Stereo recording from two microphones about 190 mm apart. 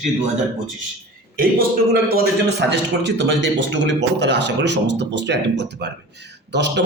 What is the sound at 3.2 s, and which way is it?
A man's voice, 70° right (ahead or behind).